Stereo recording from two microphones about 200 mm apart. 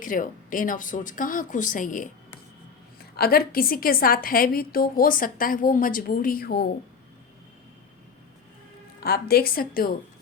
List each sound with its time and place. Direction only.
0.0 s speech: 40° left (ahead or behind)
3.2 s a woman's voice: 50° left (ahead or behind)
9.0 s a woman's voice: 50° left (ahead or behind)